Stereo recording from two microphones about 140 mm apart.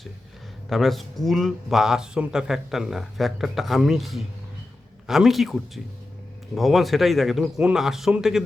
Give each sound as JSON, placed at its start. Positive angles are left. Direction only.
{"t": 0.7, "sound": "speech", "side_deg": 0}